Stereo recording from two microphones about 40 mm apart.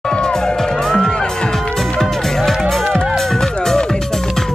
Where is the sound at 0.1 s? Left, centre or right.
Centre.